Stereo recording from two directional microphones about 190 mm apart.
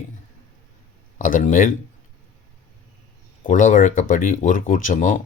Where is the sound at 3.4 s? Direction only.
45° left (ahead or behind).